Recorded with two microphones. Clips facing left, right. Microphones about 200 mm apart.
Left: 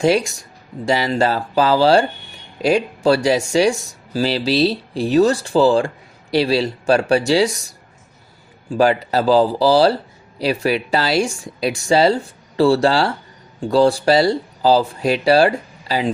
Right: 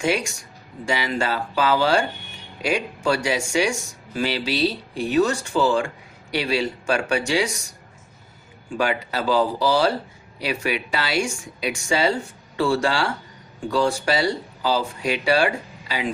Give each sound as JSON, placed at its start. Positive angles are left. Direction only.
{"t": 0.0, "sound": "speech", "side_deg": 35}
{"t": 8.8, "sound": "speech", "side_deg": 35}